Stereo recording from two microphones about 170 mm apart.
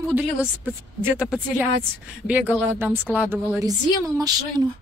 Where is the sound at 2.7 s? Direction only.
15° right (ahead or behind).